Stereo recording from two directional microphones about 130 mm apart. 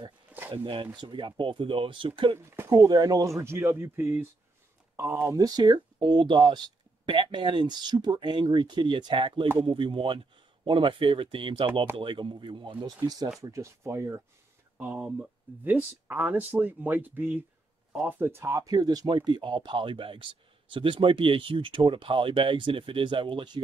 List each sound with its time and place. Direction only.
0.3 s a sound: 15° right (ahead or behind)
0.9 s speech: 40° right (ahead or behind)
2.3 s speech: 20° right (ahead or behind)
2.7 s speech: 30° right (ahead or behind)